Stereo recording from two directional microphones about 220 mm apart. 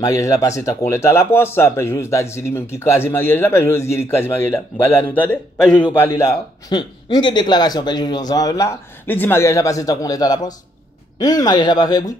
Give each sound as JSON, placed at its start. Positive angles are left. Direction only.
{"t": 0.0, "sound": "a man's voice", "side_deg": 15}